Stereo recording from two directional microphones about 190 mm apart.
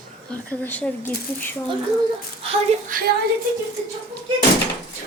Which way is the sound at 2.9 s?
45° right (ahead or behind).